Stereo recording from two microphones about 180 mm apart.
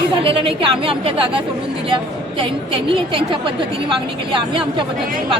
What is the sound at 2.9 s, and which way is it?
A woman's voice, 30° right (ahead or behind).